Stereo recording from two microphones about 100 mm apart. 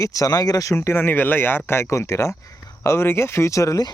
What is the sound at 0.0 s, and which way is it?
Speech, 35° left (ahead or behind).